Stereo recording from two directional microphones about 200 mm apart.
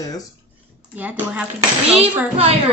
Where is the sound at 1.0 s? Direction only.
5° right (ahead or behind).